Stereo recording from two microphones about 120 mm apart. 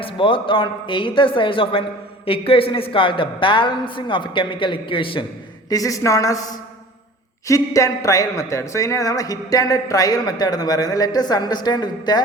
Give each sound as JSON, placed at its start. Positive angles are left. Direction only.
{"t": 0.0, "sound": "a woman's voice", "side_deg": 45}
{"t": 5.6, "sound": "speech", "side_deg": 30}
{"t": 7.4, "sound": "speech", "side_deg": 25}